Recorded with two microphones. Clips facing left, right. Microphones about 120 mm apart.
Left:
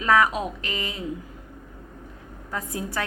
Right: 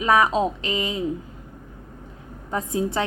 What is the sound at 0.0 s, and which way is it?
A woman's voice, 20° right (ahead or behind).